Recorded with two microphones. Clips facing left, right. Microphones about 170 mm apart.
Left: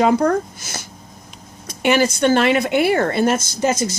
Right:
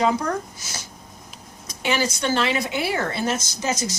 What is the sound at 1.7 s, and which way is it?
Speech, 55° left (ahead or behind).